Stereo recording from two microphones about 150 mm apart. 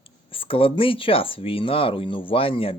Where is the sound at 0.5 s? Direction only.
35° left (ahead or behind).